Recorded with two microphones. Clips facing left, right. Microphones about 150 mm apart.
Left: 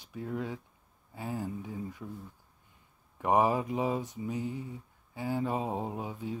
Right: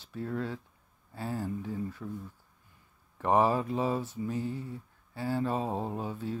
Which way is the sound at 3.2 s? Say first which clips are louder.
Right 1 dB; 15° left (ahead or behind).